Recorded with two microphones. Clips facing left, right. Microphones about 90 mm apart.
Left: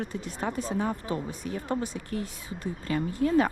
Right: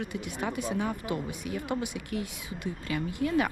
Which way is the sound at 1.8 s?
15° right (ahead or behind).